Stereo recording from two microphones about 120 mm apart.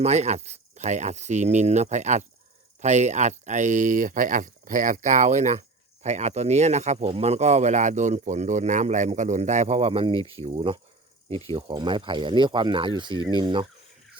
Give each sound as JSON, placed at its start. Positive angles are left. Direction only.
{"t": 0.0, "sound": "speech", "side_deg": -70}
{"t": 11.7, "sound": "speech", "side_deg": -40}